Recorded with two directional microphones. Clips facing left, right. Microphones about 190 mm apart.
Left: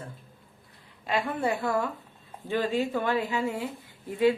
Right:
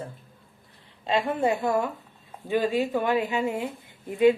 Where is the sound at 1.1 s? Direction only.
20° right (ahead or behind).